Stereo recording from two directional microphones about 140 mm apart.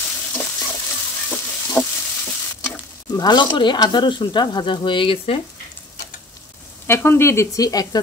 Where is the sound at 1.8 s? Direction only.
15° left (ahead or behind).